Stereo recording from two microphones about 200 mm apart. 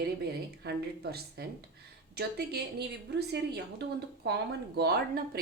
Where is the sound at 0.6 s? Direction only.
50° right (ahead or behind).